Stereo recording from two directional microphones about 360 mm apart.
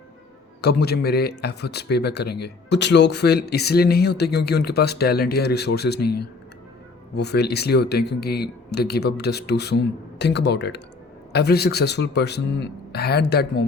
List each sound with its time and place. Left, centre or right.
0.6 s speech: left